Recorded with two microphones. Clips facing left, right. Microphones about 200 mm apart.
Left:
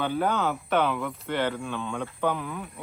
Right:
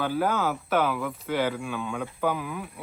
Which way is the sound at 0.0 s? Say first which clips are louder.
Even; 5° right (ahead or behind).